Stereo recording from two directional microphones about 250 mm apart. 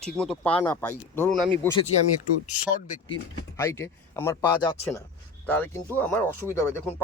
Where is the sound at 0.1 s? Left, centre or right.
Centre.